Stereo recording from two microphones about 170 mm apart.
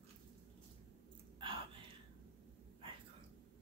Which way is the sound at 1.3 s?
30° right (ahead or behind).